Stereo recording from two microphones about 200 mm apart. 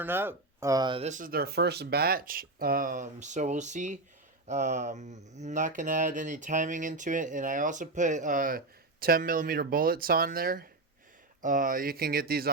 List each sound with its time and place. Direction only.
0.0 s speech: 10° right (ahead or behind); by 12.5 s 50° right (ahead or behind)